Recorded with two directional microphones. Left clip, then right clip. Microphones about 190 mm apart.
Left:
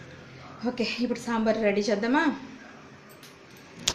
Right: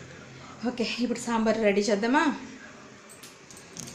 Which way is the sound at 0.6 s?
5° right (ahead or behind).